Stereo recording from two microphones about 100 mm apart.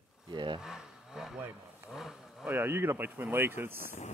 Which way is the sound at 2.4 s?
20° right (ahead or behind).